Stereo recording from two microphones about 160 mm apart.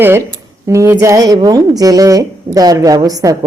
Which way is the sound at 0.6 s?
15° right (ahead or behind).